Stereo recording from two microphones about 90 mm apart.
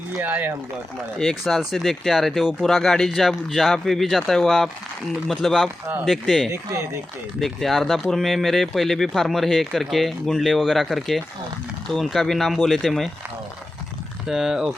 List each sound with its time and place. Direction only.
0.2 s speech: 20° right (ahead or behind)
1.2 s speech: centre (ahead or behind)
14.3 s speech: 5° right (ahead or behind)